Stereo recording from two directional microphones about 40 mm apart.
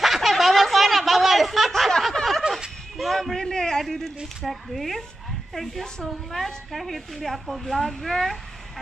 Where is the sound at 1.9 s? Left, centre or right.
Centre.